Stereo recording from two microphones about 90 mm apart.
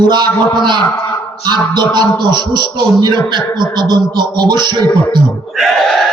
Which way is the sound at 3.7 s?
50° right (ahead or behind).